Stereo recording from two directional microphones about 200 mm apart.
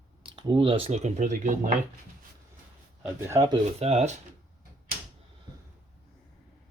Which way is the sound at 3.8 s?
30° right (ahead or behind).